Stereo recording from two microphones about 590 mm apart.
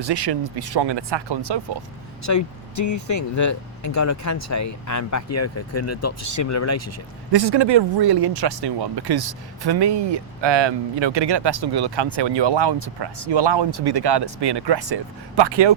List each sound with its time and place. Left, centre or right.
0.0 s speech: right
2.2 s speech: left
7.3 s speech: right